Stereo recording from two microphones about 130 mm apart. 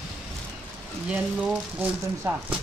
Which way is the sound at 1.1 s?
10° right (ahead or behind).